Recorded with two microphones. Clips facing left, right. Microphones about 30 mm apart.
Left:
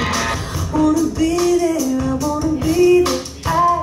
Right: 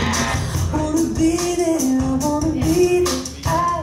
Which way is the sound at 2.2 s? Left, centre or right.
Left.